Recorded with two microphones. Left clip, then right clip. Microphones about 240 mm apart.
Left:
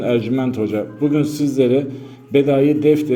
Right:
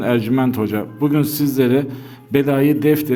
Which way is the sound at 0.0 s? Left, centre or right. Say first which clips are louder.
Right 1 dB; right.